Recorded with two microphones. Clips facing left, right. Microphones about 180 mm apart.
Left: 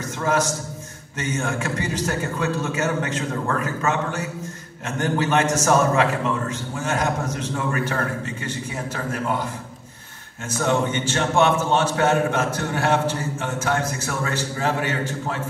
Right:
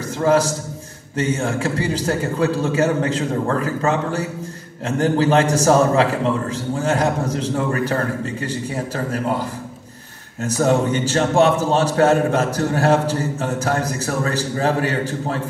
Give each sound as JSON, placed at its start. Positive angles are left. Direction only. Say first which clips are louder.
{"t": 0.2, "sound": "a man's voice", "louder": "right 6 dB", "side_deg": -35}
{"t": 10.4, "sound": "a man's voice", "louder": "right 5 dB", "side_deg": -35}